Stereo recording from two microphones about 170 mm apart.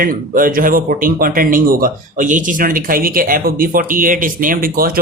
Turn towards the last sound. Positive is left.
turn(degrees=-55)  # may be behind; listen again after turning